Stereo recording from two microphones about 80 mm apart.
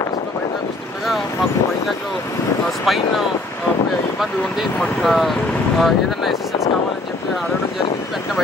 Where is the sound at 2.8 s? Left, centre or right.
Centre.